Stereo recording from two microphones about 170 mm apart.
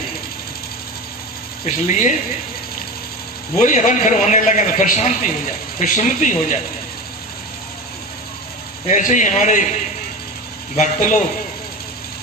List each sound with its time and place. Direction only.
1.7 s a man's voice: 45° left (ahead or behind)
3.5 s a man's voice: 45° left (ahead or behind)
8.8 s a man's voice: 45° left (ahead or behind)
10.8 s a man's voice: 45° left (ahead or behind)